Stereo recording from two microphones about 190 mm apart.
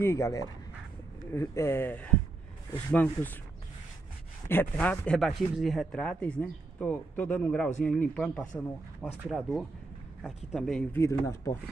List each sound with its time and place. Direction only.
0.0 s speech: 15° left (ahead or behind)
4.5 s speech: 10° left (ahead or behind)